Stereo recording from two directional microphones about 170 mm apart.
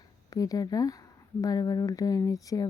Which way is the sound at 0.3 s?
20° left (ahead or behind).